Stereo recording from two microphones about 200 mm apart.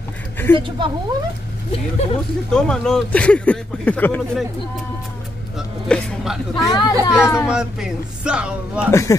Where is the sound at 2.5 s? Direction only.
5° left (ahead or behind).